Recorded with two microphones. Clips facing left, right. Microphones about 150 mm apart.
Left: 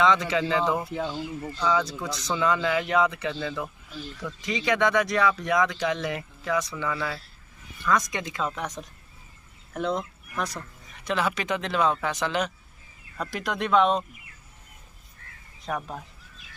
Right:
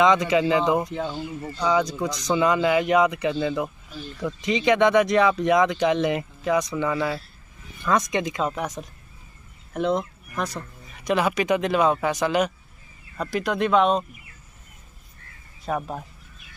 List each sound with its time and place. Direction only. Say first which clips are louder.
0.0 s a man's voice: right 4 dB; 15° right (ahead or behind)
1.4 s a man's voice: right 4 dB; 10° right (ahead or behind)
10.3 s speech: right 2 dB; centre (ahead or behind)
11.1 s a man's voice: right 5 dB; 15° right (ahead or behind)
15.7 s a man's voice: right 4 dB; 15° right (ahead or behind)